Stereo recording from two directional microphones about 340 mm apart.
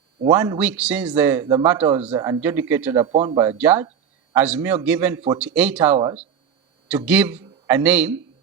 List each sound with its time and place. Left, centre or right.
0.3 s a man's voice: centre